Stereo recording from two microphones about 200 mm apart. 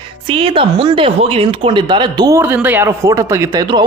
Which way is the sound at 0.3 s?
25° right (ahead or behind).